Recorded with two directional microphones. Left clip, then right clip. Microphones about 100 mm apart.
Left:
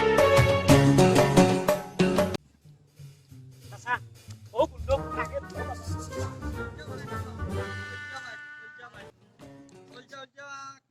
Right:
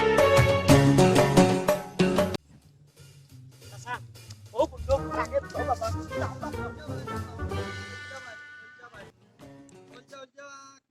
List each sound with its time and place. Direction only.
0.0 s music: centre (ahead or behind)
3.9 s music: 30° right (ahead or behind)
5.1 s music: centre (ahead or behind)
7.3 s music: centre (ahead or behind)
10.0 s a sound: 20° right (ahead or behind)